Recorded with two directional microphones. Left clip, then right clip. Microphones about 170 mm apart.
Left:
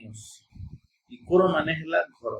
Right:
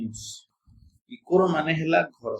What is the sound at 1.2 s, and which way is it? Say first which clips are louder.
Speech: even; 40° right (ahead or behind).